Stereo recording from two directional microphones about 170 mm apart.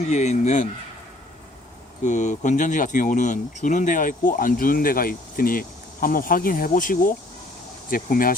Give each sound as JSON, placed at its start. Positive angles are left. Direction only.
{"t": 0.1, "sound": "speech", "side_deg": 45}
{"t": 2.0, "sound": "speech", "side_deg": 45}